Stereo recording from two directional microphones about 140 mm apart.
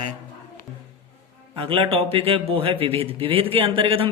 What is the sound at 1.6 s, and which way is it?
Speech, 40° right (ahead or behind).